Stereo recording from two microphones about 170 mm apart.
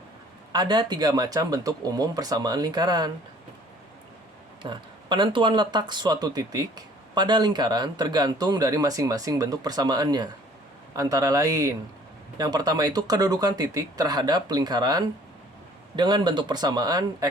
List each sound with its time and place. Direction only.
0.5 s speech: 25° right (ahead or behind)
4.6 s speech: 25° right (ahead or behind)